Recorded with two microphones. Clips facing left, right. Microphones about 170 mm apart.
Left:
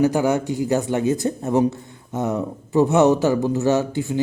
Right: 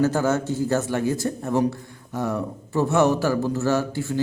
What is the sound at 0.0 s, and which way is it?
Speech, 15° left (ahead or behind).